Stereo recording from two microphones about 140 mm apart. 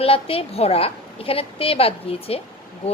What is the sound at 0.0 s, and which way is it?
A woman's voice, 40° left (ahead or behind).